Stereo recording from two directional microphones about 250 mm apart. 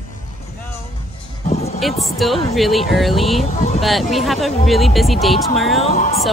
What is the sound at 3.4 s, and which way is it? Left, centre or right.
Speech, left.